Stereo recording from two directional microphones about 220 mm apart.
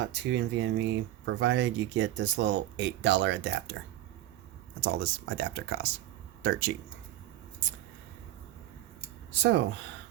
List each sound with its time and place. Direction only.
0.0 s speech: 55° right (ahead or behind)
5.4 s speech: 50° right (ahead or behind)
9.3 s speech: 55° right (ahead or behind)